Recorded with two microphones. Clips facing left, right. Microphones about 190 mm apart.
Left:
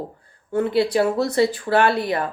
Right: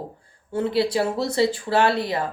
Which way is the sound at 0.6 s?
25° right (ahead or behind).